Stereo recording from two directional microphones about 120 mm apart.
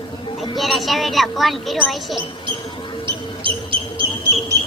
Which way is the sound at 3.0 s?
45° right (ahead or behind).